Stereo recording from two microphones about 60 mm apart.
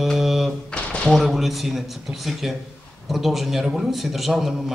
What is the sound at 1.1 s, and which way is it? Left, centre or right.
Speech, centre.